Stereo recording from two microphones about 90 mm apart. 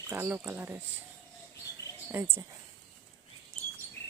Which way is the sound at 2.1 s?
25° right (ahead or behind).